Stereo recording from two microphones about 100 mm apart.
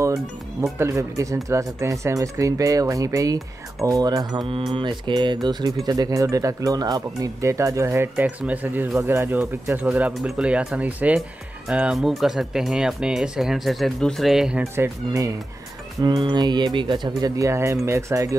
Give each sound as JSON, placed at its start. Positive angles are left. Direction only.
{"t": 0.0, "sound": "speech", "side_deg": -30}
{"t": 4.7, "sound": "speech", "side_deg": -50}
{"t": 9.8, "sound": "speech", "side_deg": -10}
{"t": 14.6, "sound": "speech", "side_deg": -30}
{"t": 16.0, "sound": "speech", "side_deg": -45}
{"t": 17.4, "sound": "speech", "side_deg": -30}